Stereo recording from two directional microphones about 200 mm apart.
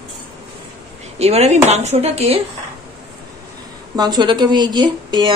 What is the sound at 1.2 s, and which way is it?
Speech, 35° right (ahead or behind).